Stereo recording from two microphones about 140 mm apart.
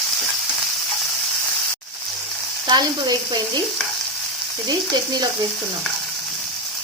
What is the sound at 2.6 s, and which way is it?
Speech, 30° right (ahead or behind).